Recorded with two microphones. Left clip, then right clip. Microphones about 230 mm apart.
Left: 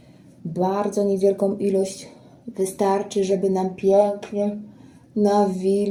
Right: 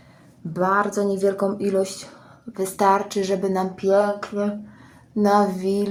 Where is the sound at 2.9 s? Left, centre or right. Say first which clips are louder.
Right 7 dB; right.